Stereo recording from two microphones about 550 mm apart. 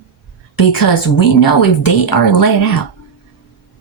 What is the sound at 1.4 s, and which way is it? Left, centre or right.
A woman's voice, left.